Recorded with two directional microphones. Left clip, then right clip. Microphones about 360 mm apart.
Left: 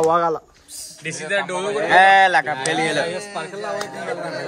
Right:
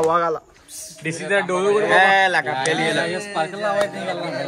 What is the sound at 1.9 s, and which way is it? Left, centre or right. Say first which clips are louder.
A man's voice: left 5 dB; left.